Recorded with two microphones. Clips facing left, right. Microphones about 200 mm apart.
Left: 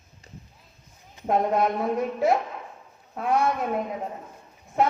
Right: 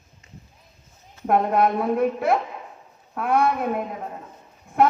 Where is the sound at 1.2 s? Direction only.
60° right (ahead or behind).